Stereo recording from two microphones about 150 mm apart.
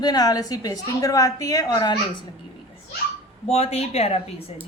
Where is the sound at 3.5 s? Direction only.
45° left (ahead or behind).